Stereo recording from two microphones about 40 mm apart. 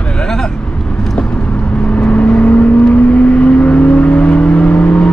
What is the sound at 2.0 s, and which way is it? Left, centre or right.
Vehicle, left.